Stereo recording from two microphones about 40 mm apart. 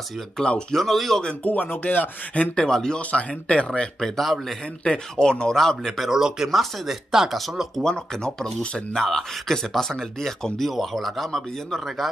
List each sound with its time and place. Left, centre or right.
0.4 s speech: left
0.7 s speech: centre
1.4 s speech: left
2.5 s speech: centre
3.0 s speech: left
4.0 s speech: centre
5.1 s speech: centre
5.6 s speech: centre
6.0 s speech: centre
7.3 s speech: centre
7.8 s speech: centre